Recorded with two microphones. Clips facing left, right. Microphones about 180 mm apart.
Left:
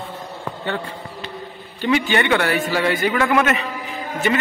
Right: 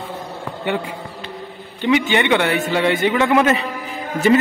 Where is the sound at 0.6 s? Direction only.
15° right (ahead or behind); by 3.7 s 30° right (ahead or behind).